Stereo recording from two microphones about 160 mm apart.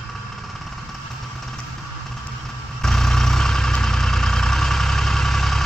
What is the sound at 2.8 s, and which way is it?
Vehicle, 5° left (ahead or behind).